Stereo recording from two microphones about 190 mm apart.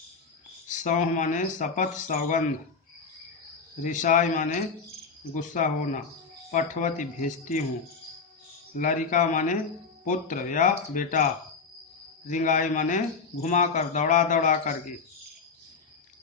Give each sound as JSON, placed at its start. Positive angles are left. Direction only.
{"t": 0.7, "sound": "speech", "side_deg": 40}
{"t": 3.8, "sound": "a man's voice", "side_deg": 40}
{"t": 8.7, "sound": "a man's voice", "side_deg": 45}
{"t": 12.3, "sound": "speech", "side_deg": 40}